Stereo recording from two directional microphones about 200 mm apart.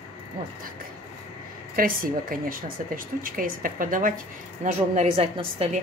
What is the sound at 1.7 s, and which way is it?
Speech, 45° right (ahead or behind).